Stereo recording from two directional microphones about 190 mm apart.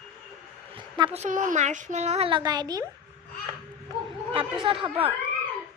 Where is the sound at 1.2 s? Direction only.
40° right (ahead or behind); by 2.8 s 20° right (ahead or behind).